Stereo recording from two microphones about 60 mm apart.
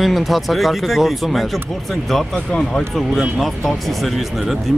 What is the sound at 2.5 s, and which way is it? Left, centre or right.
Speech, centre.